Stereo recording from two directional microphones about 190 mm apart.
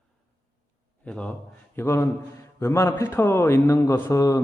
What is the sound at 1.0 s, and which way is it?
A man's voice, 5° left (ahead or behind).